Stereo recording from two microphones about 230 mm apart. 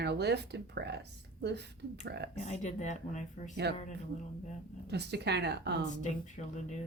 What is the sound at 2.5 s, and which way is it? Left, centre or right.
Speech, left.